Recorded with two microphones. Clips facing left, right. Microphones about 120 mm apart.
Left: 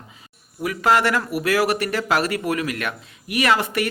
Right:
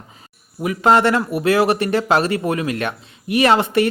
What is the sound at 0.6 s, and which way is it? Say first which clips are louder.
Speech: right 4 dB; 25° right (ahead or behind).